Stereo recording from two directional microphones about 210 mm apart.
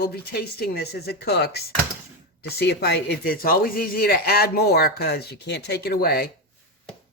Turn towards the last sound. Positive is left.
turn(degrees=45)  # may be behind; listen again after turning